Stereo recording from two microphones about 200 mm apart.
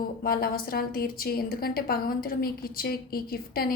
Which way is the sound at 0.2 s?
50° left (ahead or behind).